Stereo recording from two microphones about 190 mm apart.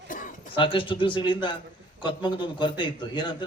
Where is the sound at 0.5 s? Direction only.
25° left (ahead or behind).